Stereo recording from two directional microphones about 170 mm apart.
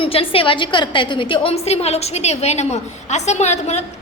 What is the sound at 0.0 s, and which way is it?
A woman's voice, 30° left (ahead or behind).